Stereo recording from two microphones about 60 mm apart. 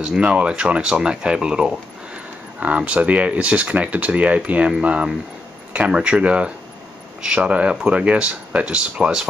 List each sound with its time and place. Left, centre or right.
0.0 s speech: centre